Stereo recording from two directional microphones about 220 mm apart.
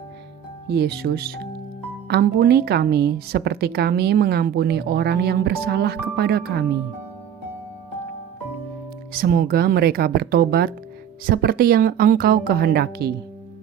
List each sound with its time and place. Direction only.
0.7 s a woman's voice: 45° right (ahead or behind)
9.1 s a woman's voice: 45° right (ahead or behind)